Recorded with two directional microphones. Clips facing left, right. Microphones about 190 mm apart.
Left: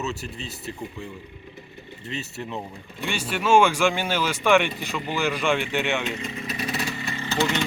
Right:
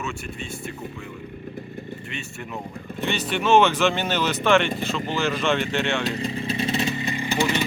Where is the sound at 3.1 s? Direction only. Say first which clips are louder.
Right 1 dB; 10° left (ahead or behind).